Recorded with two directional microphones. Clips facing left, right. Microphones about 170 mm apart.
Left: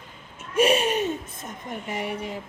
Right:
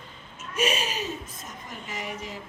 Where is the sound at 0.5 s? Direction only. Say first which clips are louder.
Left 7 dB; 55° left (ahead or behind).